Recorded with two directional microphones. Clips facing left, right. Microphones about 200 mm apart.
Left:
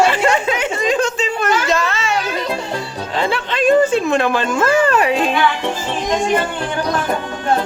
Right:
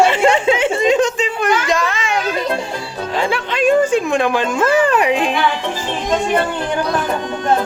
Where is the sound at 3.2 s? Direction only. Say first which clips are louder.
Even; 10° right (ahead or behind).